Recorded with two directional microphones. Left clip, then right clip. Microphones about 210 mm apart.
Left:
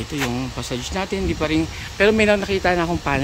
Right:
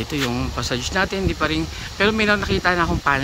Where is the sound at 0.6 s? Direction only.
Centre (ahead or behind).